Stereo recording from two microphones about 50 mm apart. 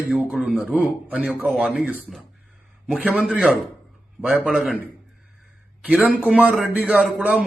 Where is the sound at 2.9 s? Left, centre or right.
Right.